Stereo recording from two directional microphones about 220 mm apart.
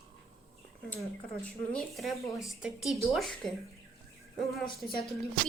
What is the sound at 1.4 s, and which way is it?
A woman's voice, 5° left (ahead or behind).